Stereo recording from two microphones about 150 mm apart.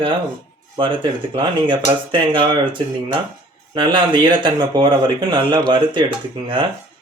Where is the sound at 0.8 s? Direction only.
35° right (ahead or behind).